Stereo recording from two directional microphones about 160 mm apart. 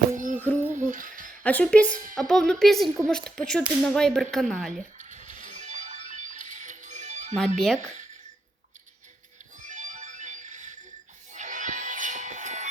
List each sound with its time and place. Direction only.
0.2 s music: 50° right (ahead or behind)
1.5 s a woman's voice: 10° left (ahead or behind)
4.9 s music: 50° right (ahead or behind)
7.3 s speech: centre (ahead or behind)
9.6 s music: 50° right (ahead or behind)